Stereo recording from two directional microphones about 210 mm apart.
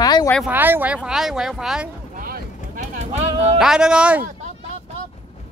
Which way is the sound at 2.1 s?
45° right (ahead or behind).